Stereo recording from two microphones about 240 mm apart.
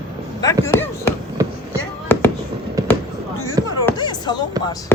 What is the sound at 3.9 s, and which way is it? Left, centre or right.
Basketball bounce, centre.